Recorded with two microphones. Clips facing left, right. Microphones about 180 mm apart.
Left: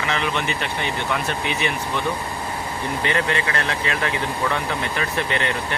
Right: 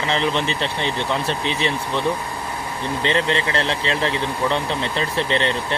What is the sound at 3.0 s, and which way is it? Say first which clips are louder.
Speech: right 3 dB; 25° right (ahead or behind).